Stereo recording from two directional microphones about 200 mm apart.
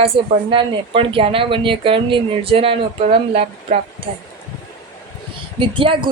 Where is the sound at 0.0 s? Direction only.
25° right (ahead or behind).